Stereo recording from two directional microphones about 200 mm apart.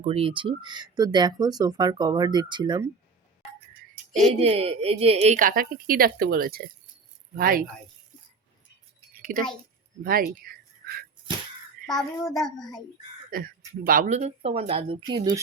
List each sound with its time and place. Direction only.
0.0 s speech: 30° right (ahead or behind)
4.4 s a woman's voice: 30° right (ahead or behind); by 7.6 s 45° right (ahead or behind)
9.1 s a sound: 45° right (ahead or behind)
10.0 s speech: 45° right (ahead or behind)
11.9 s a child's voice: centre (ahead or behind)
13.3 s a woman's voice: 45° right (ahead or behind); by 15.4 s 20° right (ahead or behind)